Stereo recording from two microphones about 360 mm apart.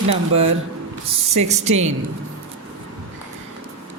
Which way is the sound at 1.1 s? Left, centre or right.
Centre.